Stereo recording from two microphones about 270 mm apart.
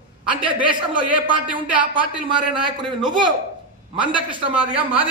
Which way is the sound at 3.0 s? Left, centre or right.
Centre.